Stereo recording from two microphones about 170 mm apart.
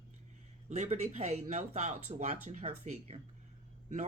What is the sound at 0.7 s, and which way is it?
Speech, 40° right (ahead or behind).